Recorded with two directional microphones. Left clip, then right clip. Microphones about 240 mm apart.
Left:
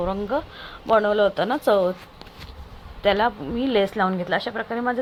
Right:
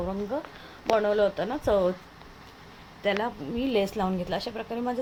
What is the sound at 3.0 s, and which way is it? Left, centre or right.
A woman's voice, centre.